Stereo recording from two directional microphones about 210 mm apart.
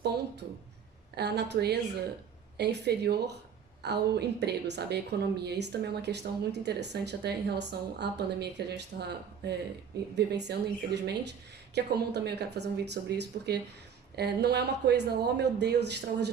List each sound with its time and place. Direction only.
1.1 s speech: 50° right (ahead or behind)